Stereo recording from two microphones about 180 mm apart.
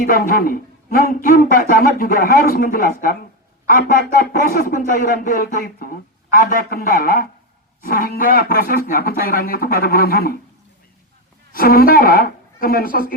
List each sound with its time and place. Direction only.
0.0 s speech: 50° left (ahead or behind)
11.5 s speech: 55° left (ahead or behind)